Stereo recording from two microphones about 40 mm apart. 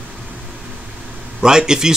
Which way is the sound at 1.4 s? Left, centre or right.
Centre.